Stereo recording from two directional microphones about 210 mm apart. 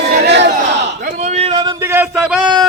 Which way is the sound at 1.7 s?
10° right (ahead or behind).